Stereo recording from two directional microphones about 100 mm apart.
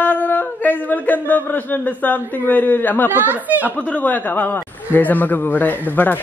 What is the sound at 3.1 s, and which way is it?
Speech, 20° right (ahead or behind).